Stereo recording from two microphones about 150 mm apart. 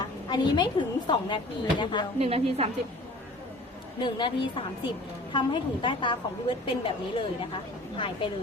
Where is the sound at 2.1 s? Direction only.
40° right (ahead or behind).